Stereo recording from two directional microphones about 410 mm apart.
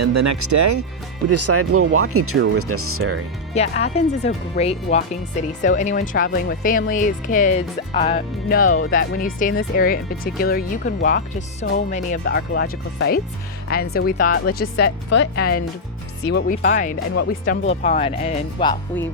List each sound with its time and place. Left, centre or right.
0.0 s speech: right
3.5 s speech: centre